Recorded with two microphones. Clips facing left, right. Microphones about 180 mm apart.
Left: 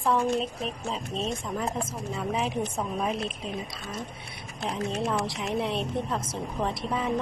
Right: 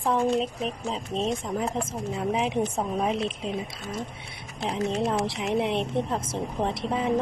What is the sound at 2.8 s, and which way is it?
Speech, 25° right (ahead or behind).